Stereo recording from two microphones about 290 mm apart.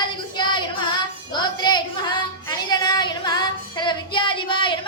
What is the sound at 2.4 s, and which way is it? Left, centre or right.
Child singing, centre.